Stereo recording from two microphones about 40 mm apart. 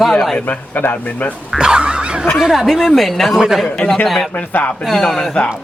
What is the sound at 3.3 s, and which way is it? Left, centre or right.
Speech, centre.